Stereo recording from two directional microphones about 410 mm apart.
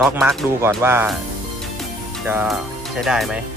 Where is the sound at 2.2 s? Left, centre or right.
Centre.